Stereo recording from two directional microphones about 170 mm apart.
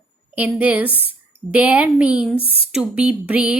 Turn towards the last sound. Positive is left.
turn(degrees=-5)  # may be behind; listen again after turning